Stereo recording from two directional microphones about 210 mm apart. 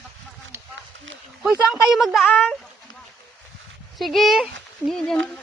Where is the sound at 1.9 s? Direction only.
Centre (ahead or behind).